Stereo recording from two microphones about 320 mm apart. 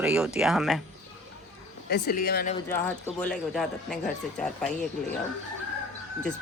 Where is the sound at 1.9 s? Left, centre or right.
Left.